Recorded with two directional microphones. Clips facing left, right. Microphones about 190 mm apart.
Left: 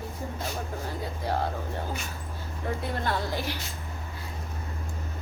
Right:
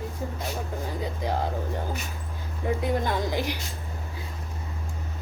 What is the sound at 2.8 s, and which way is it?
Speech, 15° right (ahead or behind).